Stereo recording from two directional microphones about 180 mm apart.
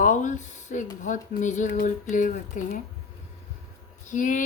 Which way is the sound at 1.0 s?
45° left (ahead or behind).